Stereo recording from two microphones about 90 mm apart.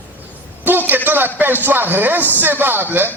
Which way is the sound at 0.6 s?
20° right (ahead or behind).